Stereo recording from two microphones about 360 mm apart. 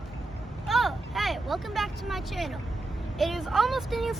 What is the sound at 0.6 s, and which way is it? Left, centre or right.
Vehicle, centre.